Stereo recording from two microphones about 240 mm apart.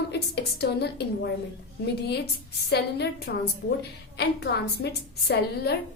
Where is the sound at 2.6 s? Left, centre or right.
Left.